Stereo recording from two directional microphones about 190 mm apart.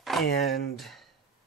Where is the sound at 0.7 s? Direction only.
Centre (ahead or behind).